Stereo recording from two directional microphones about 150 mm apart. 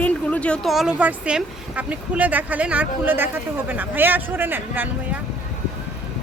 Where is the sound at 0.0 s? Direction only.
10° left (ahead or behind); by 4.9 s 15° right (ahead or behind).